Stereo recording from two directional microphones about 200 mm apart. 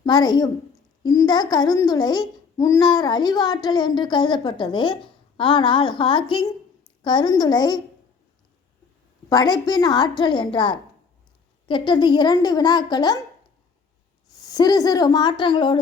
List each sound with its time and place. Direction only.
0.0 s a child's voice: 20° left (ahead or behind)
9.3 s a child's voice: 20° left (ahead or behind)
14.4 s a child's voice: 20° left (ahead or behind)